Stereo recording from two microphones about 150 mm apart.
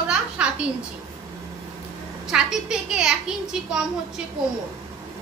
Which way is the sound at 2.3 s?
5° right (ahead or behind).